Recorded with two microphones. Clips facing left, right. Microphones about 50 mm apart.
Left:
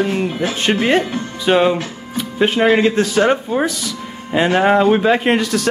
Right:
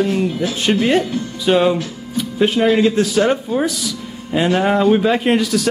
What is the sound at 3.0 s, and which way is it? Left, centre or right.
Speech, centre.